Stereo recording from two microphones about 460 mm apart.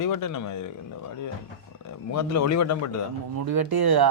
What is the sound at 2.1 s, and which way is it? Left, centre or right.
Speech, left.